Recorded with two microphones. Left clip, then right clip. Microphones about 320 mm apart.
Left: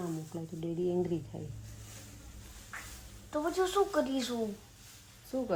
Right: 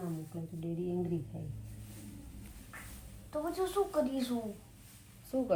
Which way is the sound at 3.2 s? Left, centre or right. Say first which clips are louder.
Left 4 dB; left.